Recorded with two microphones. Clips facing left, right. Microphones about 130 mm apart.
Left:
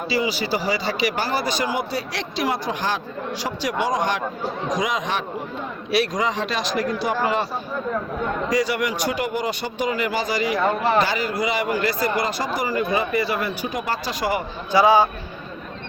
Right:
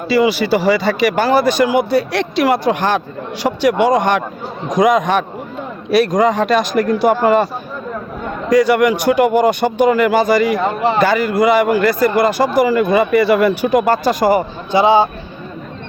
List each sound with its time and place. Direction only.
0.1 s a man's voice: 65° right (ahead or behind)
8.4 s speech: 55° right (ahead or behind)
14.7 s speech: 25° right (ahead or behind)